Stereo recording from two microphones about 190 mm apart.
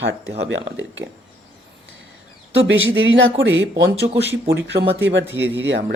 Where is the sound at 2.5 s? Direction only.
85° right.